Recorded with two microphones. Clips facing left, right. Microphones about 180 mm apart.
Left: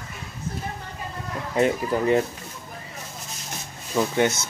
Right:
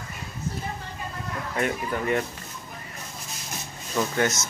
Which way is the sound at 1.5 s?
30° left (ahead or behind).